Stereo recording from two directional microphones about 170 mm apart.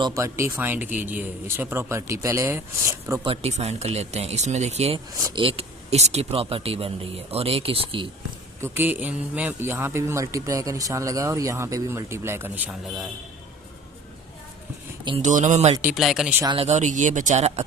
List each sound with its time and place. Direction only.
0.0 s a man's voice: 20° right (ahead or behind)
3.2 s speech: 40° right (ahead or behind)
5.1 s speech: 20° right (ahead or behind)
5.4 s speech: 35° right (ahead or behind)
8.6 s a man's voice: 15° right (ahead or behind)
15.2 s speech: 45° right (ahead or behind)
15.8 s speech: 5° right (ahead or behind)
16.6 s speech: 40° right (ahead or behind)